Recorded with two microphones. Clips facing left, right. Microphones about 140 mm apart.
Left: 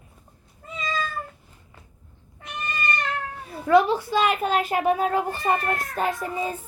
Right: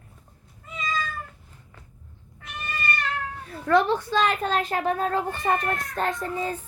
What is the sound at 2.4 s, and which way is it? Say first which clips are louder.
Cat: left 3 dB; 20° left (ahead or behind).